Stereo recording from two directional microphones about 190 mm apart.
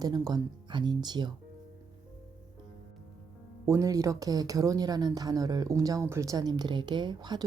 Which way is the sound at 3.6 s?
15° right (ahead or behind).